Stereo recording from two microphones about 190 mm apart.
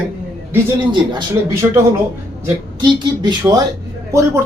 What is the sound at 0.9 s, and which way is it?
Speech, 20° right (ahead or behind).